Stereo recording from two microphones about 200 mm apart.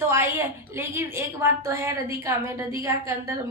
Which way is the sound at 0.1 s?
15° right (ahead or behind).